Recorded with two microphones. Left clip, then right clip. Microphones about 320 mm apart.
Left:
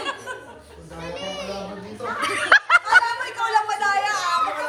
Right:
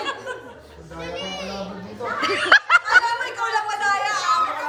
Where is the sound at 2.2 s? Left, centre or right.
Centre.